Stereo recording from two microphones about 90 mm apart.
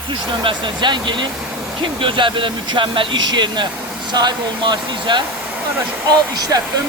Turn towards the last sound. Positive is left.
turn(degrees=-45)  # may be behind; listen again after turning